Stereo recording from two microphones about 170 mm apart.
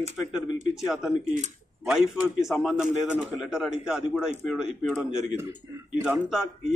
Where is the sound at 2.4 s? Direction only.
Centre (ahead or behind).